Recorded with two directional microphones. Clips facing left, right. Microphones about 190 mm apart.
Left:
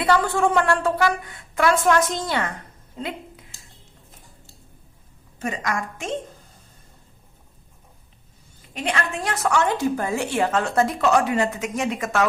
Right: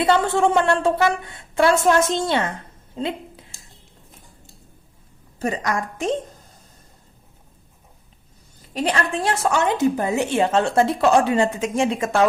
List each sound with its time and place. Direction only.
0.0 s a woman's voice: 25° right (ahead or behind)
2.9 s a sound: 25° right (ahead or behind)
5.4 s a woman's voice: 35° right (ahead or behind)
8.7 s a woman's voice: 35° right (ahead or behind)